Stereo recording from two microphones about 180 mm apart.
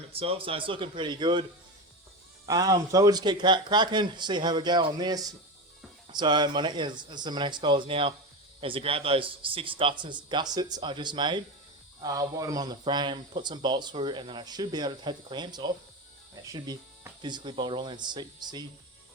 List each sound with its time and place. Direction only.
0.1 s speech: 30° right (ahead or behind)
2.5 s speech: 20° right (ahead or behind)